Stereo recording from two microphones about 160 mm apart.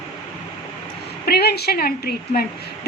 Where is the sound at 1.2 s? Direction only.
85° left.